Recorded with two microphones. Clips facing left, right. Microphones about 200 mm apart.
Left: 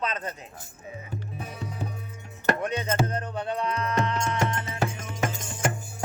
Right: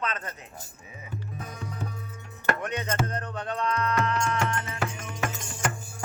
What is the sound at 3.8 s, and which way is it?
Music, 30° left (ahead or behind).